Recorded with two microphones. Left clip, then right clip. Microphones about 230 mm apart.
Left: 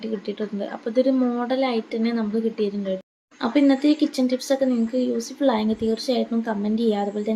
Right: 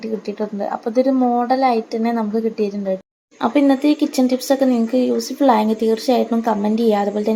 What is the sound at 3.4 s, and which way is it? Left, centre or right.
Speech, centre.